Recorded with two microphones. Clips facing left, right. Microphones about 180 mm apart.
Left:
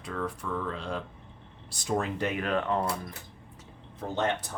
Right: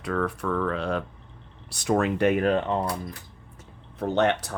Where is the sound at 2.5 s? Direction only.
25° right (ahead or behind).